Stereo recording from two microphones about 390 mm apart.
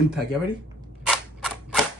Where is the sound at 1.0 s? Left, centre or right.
Centre.